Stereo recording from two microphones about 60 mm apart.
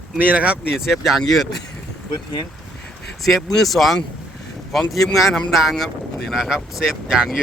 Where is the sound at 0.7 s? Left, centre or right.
Centre.